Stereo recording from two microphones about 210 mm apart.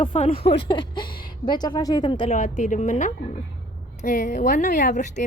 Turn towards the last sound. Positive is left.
turn(degrees=35)  # may be behind; listen again after turning